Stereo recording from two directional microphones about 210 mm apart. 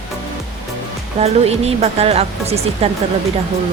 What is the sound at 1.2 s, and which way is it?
Speech, 30° right (ahead or behind).